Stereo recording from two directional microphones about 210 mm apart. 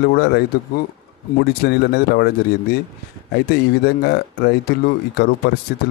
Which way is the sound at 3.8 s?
50° left (ahead or behind).